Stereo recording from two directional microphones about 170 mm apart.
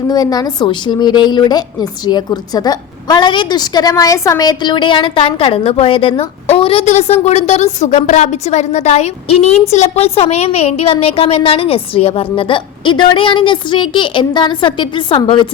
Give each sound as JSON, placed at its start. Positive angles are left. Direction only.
{"t": 0.1, "sound": "a woman's voice", "side_deg": 20}